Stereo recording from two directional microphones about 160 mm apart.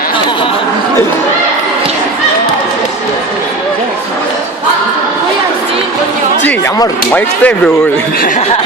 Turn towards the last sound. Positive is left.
turn(degrees=10)  # may be behind; listen again after turning